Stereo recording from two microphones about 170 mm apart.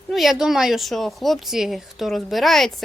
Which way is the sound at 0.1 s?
Centre (ahead or behind).